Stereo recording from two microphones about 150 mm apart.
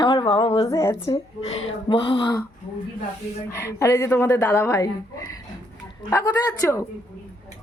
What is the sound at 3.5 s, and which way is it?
A woman's voice, 20° left (ahead or behind).